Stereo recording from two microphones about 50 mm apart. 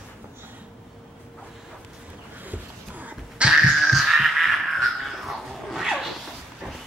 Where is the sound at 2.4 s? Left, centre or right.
Right.